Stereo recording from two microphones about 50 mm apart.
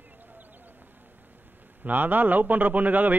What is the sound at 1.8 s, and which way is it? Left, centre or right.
A man's voice, right.